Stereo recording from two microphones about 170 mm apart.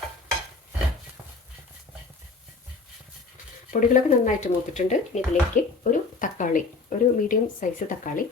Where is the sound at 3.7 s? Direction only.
50° left (ahead or behind).